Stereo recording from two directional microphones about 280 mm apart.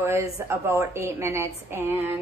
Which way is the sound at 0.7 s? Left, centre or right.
Centre.